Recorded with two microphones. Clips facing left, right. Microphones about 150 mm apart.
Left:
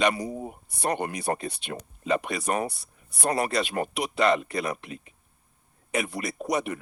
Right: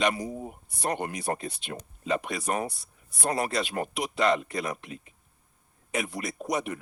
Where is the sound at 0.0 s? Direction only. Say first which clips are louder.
Left 2 dB; 70° left (ahead or behind).